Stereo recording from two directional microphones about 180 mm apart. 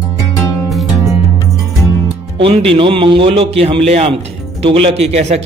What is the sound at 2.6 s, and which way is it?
Speech, 30° right (ahead or behind).